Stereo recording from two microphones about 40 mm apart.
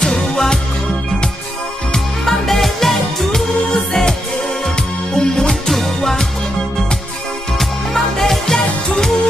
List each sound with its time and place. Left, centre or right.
0.0 s music: centre
2.2 s music: centre
5.7 s music: centre
7.5 s music: centre